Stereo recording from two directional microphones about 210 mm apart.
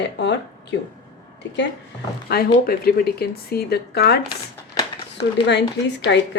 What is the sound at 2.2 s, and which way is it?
Speech, 45° left (ahead or behind).